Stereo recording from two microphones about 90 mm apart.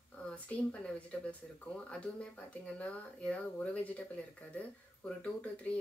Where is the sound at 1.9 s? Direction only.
15° left (ahead or behind).